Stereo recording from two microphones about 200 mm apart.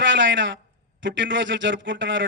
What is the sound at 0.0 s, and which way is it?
A man's voice, 65° right (ahead or behind).